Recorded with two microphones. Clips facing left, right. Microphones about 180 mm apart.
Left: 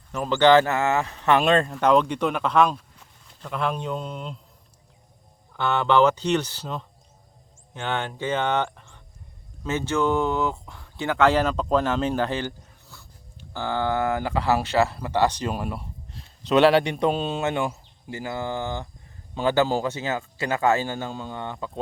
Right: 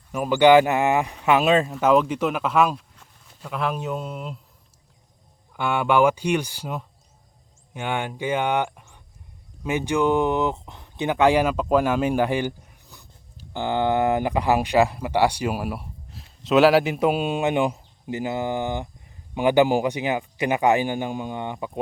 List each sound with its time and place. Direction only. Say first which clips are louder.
0.1 s speech: right 2 dB; 10° right (ahead or behind)
5.5 s speech: even; 10° right (ahead or behind)